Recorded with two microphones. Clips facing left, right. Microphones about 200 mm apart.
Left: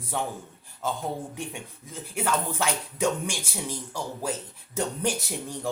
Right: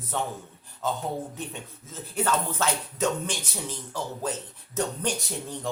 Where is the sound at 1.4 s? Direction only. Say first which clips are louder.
Left 1 dB; 10° left (ahead or behind).